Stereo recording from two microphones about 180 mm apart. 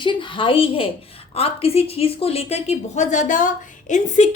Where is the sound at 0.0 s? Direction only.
25° left (ahead or behind).